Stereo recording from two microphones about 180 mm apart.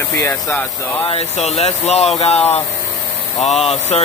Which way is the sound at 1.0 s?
35° left (ahead or behind).